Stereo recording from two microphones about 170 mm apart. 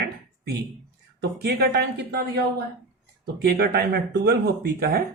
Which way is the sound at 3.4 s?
65° right (ahead or behind).